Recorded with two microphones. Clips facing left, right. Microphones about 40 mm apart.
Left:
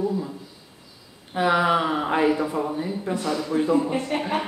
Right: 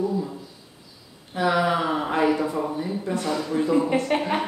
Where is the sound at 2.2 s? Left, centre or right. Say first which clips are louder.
Even; centre.